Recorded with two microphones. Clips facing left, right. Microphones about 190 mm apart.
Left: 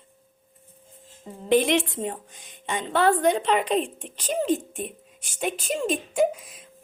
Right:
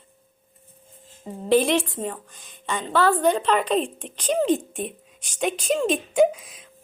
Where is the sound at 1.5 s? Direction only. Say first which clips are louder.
Right 1 dB; 20° left (ahead or behind); by 6.6 s centre (ahead or behind).